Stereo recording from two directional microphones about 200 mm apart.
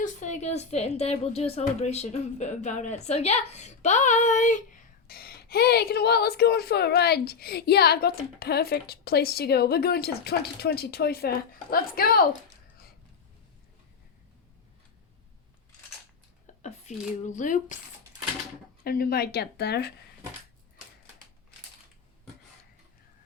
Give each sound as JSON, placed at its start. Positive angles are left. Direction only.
{"t": 0.0, "sound": "a woman's voice", "side_deg": 40}
{"t": 16.6, "sound": "speech", "side_deg": 35}
{"t": 18.9, "sound": "a woman's voice", "side_deg": 50}